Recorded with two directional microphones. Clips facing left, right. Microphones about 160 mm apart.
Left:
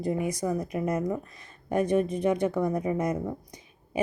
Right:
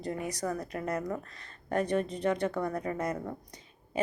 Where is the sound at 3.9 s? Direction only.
15° left (ahead or behind).